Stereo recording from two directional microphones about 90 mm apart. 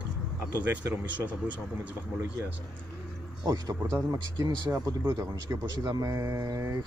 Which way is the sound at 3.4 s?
50° right (ahead or behind).